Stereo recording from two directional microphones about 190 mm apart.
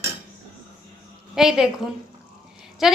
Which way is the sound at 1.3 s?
Centre (ahead or behind).